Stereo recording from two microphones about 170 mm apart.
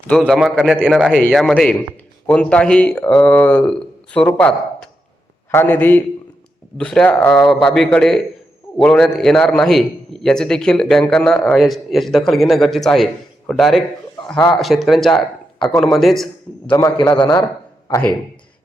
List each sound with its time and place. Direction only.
0.1 s a man's voice: centre (ahead or behind)
17.0 s a man's voice: 25° left (ahead or behind)